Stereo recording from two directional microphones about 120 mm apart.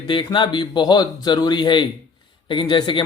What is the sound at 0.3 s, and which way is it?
Speech, 40° left (ahead or behind).